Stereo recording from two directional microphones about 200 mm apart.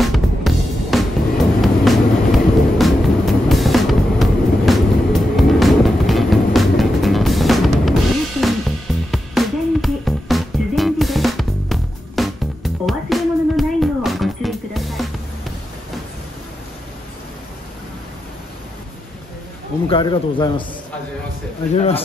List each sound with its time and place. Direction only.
0.0 s music: centre (ahead or behind)
1.6 s vehicle: centre (ahead or behind)
19.9 s a man's voice: 25° left (ahead or behind)
21.7 s speech: 30° left (ahead or behind)